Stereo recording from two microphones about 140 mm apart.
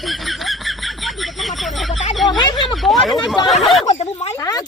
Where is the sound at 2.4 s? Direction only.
30° left (ahead or behind).